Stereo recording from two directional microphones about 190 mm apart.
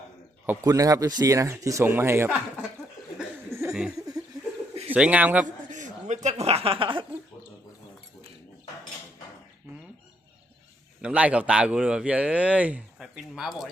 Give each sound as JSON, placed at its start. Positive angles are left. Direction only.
{"t": 0.4, "sound": "speech", "side_deg": -15}
{"t": 3.2, "sound": "a sound", "side_deg": -15}
{"t": 4.9, "sound": "speech", "side_deg": -5}
{"t": 5.6, "sound": "a sound", "side_deg": -40}
{"t": 6.2, "sound": "speech", "side_deg": -35}
{"t": 11.0, "sound": "a man's voice", "side_deg": -5}